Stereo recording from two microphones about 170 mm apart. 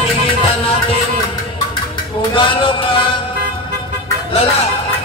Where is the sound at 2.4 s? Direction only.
30° left (ahead or behind).